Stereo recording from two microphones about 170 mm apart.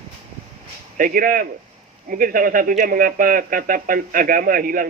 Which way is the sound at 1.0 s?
55° right (ahead or behind).